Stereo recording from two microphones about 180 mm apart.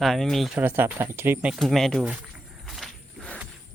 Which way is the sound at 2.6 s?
Centre (ahead or behind).